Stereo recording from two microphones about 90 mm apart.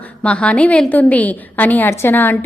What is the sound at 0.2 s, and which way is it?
A woman's voice, 15° left (ahead or behind).